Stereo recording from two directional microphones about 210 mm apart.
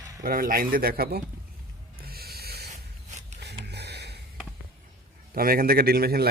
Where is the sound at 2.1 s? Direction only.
45° right (ahead or behind).